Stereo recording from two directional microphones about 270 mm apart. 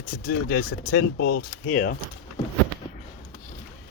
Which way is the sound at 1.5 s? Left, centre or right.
Left.